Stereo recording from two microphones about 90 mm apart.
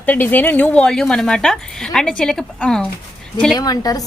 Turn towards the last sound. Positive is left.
turn(degrees=45)  # may be behind; listen again after turning